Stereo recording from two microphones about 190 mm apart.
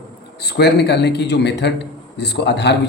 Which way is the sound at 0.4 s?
60° left (ahead or behind).